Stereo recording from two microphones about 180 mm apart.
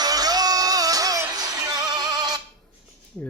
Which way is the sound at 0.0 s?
20° right (ahead or behind).